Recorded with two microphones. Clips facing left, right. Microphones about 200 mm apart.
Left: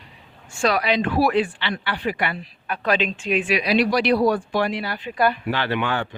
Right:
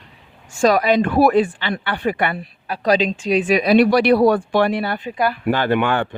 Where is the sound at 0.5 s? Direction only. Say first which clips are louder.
Right 6 dB; 45° right (ahead or behind).